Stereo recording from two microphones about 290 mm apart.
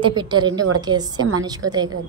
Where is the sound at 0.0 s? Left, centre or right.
Centre.